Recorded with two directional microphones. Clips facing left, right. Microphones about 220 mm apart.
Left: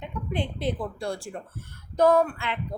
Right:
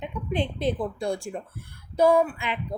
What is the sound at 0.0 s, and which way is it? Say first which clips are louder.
Speech: right 3 dB; 20° right (ahead or behind).